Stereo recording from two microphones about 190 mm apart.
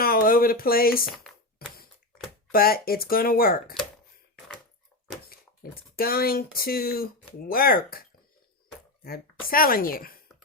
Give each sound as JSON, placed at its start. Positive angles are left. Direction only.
{"t": 0.0, "sound": "a sound", "side_deg": 50}
{"t": 2.5, "sound": "speech", "side_deg": 50}
{"t": 5.3, "sound": "speech", "side_deg": 50}
{"t": 9.5, "sound": "speech", "side_deg": 50}